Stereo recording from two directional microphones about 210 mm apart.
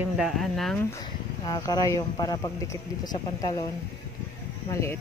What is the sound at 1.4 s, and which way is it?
Speech, 20° left (ahead or behind).